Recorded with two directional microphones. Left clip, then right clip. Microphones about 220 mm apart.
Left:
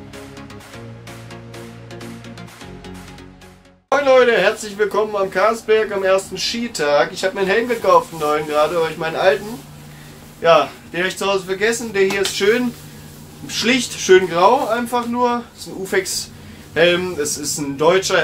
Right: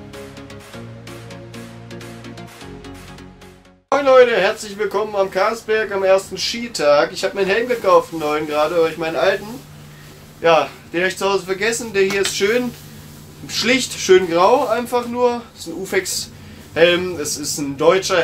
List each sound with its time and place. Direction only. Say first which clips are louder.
3.9 s speech: right 1 dB; centre (ahead or behind)
10.4 s speech: left 1 dB; centre (ahead or behind)